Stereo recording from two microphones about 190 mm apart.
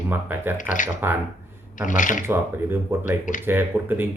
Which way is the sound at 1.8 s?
40° left (ahead or behind).